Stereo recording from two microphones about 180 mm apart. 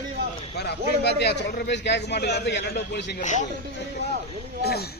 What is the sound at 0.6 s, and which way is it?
A man's voice, 65° left (ahead or behind).